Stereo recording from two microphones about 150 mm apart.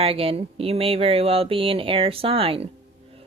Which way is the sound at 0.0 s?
40° right (ahead or behind).